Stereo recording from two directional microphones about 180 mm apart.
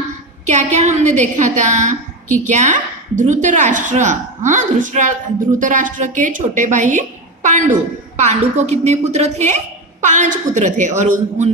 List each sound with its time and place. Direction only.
0.5 s a woman's voice: 40° right (ahead or behind)